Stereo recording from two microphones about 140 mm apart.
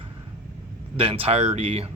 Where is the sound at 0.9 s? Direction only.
45° right (ahead or behind).